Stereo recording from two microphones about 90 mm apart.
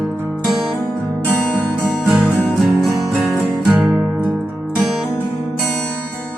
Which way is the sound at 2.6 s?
Centre (ahead or behind).